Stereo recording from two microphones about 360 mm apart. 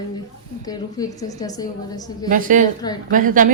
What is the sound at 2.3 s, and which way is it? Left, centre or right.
Speech, right.